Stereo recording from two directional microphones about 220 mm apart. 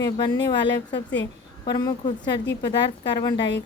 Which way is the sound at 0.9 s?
55° left (ahead or behind).